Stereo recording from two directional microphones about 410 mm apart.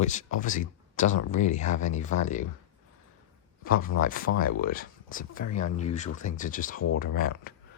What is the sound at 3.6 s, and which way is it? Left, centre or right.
Speech, left.